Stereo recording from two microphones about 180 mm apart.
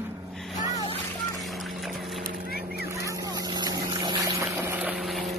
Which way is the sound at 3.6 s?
25° right (ahead or behind).